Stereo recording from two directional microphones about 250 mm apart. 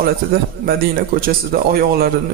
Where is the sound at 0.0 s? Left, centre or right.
Right.